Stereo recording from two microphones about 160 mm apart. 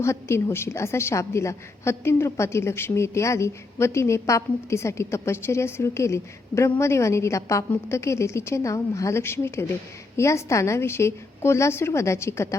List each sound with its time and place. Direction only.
0.0 s a woman's voice: 15° left (ahead or behind)